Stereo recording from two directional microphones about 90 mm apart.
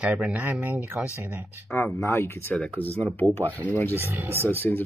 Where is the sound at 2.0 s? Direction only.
25° left (ahead or behind).